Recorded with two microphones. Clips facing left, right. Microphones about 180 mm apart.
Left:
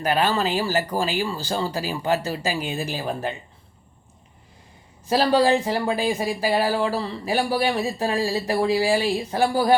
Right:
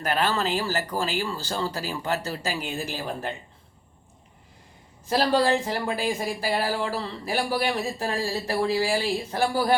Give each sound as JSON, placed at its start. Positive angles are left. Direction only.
{"t": 0.0, "sound": "speech", "side_deg": 15}
{"t": 5.0, "sound": "speech", "side_deg": 15}